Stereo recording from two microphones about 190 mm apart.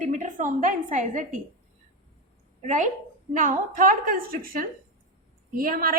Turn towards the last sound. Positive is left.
turn(degrees=-50)  # may be behind; listen again after turning